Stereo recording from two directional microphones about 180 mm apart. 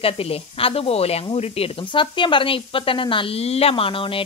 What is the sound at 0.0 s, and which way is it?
Speech, 30° left (ahead or behind).